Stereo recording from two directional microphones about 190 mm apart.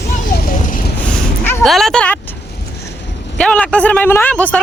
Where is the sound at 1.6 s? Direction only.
Centre (ahead or behind).